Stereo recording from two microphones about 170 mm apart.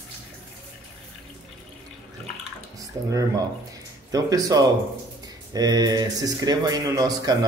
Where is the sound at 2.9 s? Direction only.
20° right (ahead or behind).